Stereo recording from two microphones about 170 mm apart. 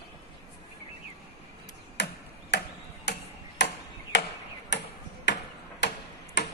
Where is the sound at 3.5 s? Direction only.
90° left.